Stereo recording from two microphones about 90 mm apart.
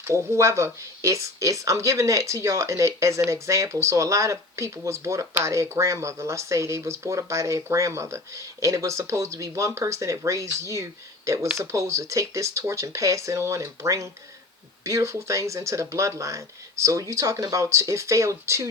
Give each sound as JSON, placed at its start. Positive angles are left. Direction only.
{"t": 0.0, "sound": "speech", "side_deg": -30}